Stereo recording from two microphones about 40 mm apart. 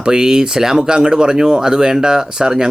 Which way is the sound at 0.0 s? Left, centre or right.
Centre.